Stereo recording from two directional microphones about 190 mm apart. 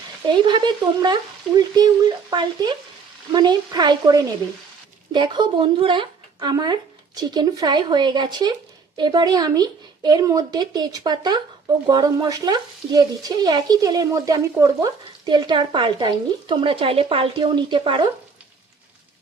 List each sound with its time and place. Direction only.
0.4 s speech: 25° right (ahead or behind)